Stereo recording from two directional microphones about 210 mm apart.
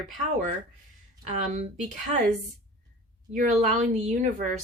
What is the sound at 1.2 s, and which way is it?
Speech, 35° right (ahead or behind).